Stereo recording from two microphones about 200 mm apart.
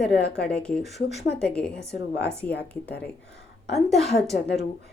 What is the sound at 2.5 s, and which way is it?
Speech, 55° left (ahead or behind).